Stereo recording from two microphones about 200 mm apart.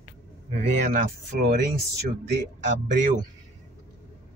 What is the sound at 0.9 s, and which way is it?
Speech, 50° right (ahead or behind).